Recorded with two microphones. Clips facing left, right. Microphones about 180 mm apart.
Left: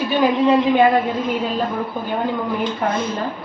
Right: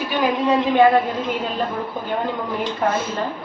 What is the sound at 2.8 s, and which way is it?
Speech, 5° right (ahead or behind).